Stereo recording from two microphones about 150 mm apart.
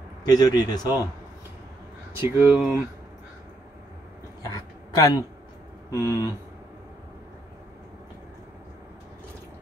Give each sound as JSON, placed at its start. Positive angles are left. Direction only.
{"t": 0.2, "sound": "a man's voice", "side_deg": 25}
{"t": 2.2, "sound": "speech", "side_deg": -15}
{"t": 4.4, "sound": "a sound", "side_deg": 25}
{"t": 5.9, "sound": "speech", "side_deg": -15}